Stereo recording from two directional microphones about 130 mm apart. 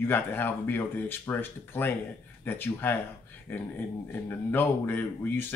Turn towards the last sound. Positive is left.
turn(degrees=15)  # may be behind; listen again after turning